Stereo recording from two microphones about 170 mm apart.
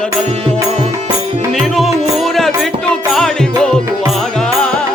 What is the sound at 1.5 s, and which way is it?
Music, centre (ahead or behind).